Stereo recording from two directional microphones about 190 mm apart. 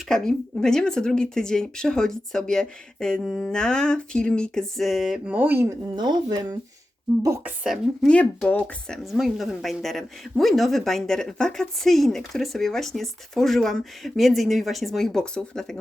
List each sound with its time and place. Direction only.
0.1 s speech: 5° left (ahead or behind); by 7.5 s 15° right (ahead or behind)
7.6 s speech: centre (ahead or behind)